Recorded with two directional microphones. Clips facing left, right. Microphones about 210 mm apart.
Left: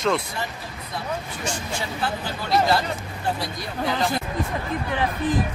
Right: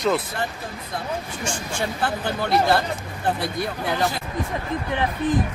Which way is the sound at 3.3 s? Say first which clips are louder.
Right 3 dB; 60° right (ahead or behind).